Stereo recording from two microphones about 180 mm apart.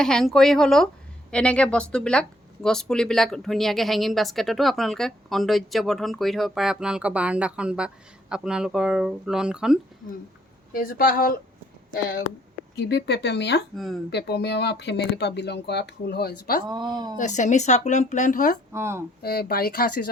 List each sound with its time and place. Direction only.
0.0 s speech: 5° left (ahead or behind)
10.7 s speech: 55° left (ahead or behind)
12.7 s speech: 70° left (ahead or behind)
13.7 s speech: centre (ahead or behind)
14.1 s speech: 70° left (ahead or behind)
16.6 s a woman's voice: 25° right (ahead or behind)
17.2 s speech: 40° left (ahead or behind)
18.7 s speech: 15° right (ahead or behind)
19.2 s speech: 60° left (ahead or behind)